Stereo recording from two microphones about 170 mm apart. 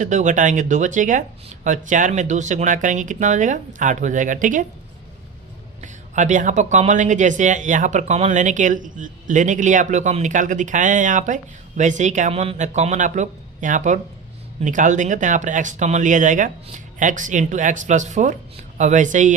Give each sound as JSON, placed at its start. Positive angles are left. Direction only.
{"t": 0.0, "sound": "speech", "side_deg": -45}
{"t": 5.8, "sound": "speech", "side_deg": -45}